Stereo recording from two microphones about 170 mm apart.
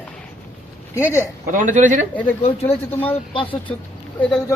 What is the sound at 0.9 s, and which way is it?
Speech, 15° left (ahead or behind).